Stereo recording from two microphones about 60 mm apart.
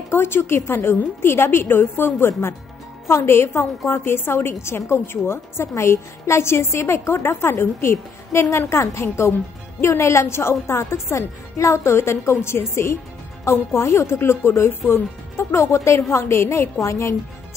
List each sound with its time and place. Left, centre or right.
0.1 s speech: left